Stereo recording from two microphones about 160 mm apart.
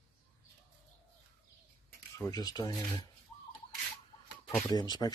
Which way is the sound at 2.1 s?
20° left (ahead or behind).